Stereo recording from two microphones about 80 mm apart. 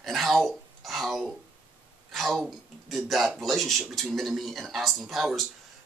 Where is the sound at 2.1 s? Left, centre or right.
Centre.